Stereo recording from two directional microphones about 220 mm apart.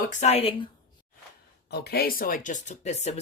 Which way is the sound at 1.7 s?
45° left (ahead or behind).